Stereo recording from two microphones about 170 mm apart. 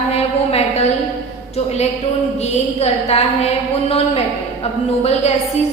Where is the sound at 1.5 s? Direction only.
40° left (ahead or behind).